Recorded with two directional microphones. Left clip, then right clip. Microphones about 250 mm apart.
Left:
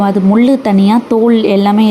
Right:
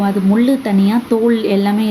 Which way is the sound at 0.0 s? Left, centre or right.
Centre.